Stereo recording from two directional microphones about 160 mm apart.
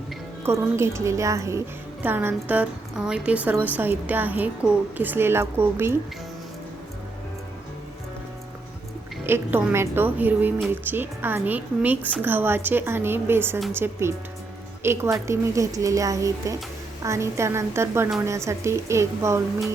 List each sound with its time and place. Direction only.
0.4 s a woman's voice: 15° right (ahead or behind)
9.2 s a woman's voice: 15° right (ahead or behind)